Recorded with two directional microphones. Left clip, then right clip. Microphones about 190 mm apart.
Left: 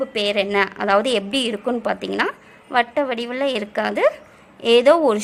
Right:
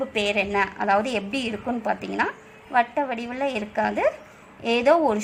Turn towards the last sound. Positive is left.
turn(degrees=35)  # may be behind; listen again after turning